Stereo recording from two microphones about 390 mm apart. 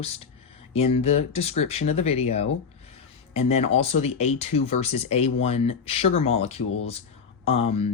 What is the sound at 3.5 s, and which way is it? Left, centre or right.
Speech, centre.